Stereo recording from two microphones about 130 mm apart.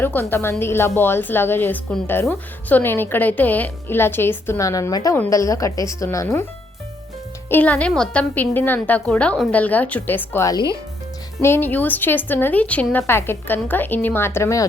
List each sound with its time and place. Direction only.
0.0 s a woman's voice: 15° left (ahead or behind)
7.5 s a woman's voice: 10° left (ahead or behind); by 10.7 s 25° left (ahead or behind)
11.4 s a woman's voice: 15° left (ahead or behind)